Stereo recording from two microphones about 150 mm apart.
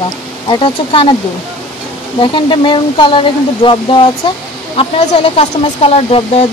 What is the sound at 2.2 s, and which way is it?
Speech, 35° left (ahead or behind).